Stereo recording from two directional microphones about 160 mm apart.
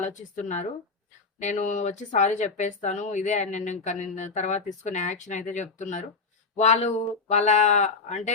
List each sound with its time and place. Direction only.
0.1 s speech: 50° left (ahead or behind)